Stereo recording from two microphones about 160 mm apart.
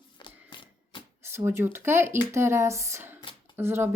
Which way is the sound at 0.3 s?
30° left (ahead or behind).